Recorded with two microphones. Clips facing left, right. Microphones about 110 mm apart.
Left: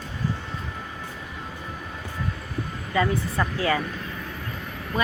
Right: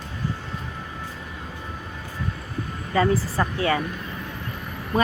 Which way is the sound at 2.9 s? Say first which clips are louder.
Right 3 dB; 35° right (ahead or behind).